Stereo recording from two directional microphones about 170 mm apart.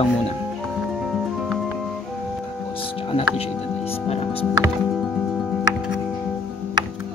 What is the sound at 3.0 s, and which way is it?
Speech, 35° left (ahead or behind).